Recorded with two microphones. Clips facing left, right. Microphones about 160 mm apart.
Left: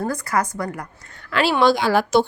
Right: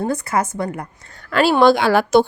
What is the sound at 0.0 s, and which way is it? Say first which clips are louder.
A woman's voice: right 2 dB; 25° right (ahead or behind).